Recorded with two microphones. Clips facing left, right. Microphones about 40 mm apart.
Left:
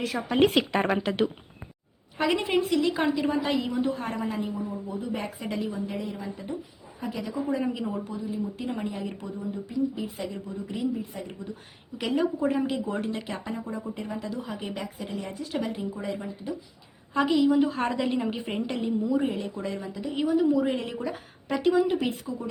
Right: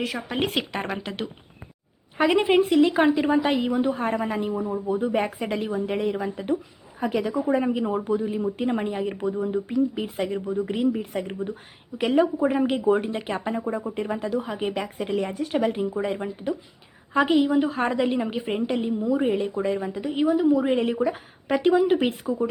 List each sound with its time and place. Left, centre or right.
0.0 s speech: centre
2.1 s a woman's voice: right
7.6 s speech: right
7.9 s a woman's voice: right
9.4 s speech: right
11.9 s speech: right
12.7 s a woman's voice: right
14.8 s a woman's voice: right
17.2 s speech: right
17.6 s a woman's voice: centre
19.3 s a woman's voice: right
20.1 s a woman's voice: centre; by 22.4 s right